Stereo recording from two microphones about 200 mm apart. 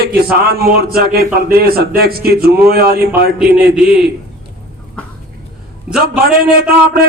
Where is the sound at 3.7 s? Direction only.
5° right (ahead or behind).